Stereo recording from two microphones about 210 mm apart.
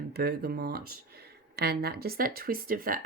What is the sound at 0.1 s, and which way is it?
A woman's voice, 50° right (ahead or behind).